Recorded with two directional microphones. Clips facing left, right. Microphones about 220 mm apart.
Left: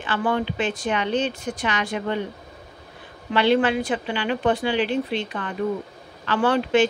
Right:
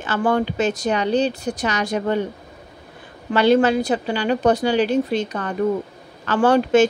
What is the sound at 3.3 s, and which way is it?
A woman's voice, 40° right (ahead or behind).